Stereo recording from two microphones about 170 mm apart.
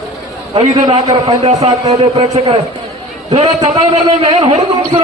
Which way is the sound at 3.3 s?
40° right (ahead or behind).